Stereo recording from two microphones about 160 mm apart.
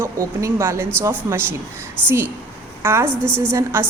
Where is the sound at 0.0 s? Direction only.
15° right (ahead or behind).